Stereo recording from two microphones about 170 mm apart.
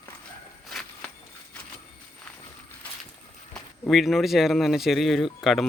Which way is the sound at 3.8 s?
Centre (ahead or behind).